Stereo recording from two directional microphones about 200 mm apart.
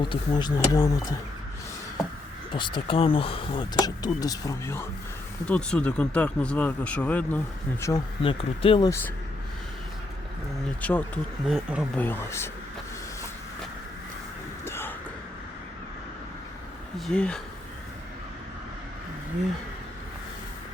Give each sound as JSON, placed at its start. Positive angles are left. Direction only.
{"t": 0.1, "sound": "speech", "side_deg": 20}
{"t": 2.5, "sound": "speech", "side_deg": 25}
{"t": 8.2, "sound": "speech", "side_deg": 25}
{"t": 8.9, "sound": "speech", "side_deg": 10}
{"t": 10.8, "sound": "speech", "side_deg": 10}
{"t": 11.9, "sound": "speech", "side_deg": 10}
{"t": 14.6, "sound": "music", "side_deg": 10}
{"t": 17.1, "sound": "speech", "side_deg": 5}